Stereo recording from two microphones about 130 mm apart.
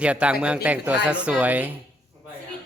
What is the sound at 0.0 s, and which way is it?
Speech, 10° right (ahead or behind).